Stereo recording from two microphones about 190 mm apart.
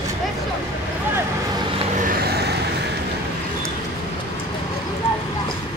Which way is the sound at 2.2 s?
55° right (ahead or behind).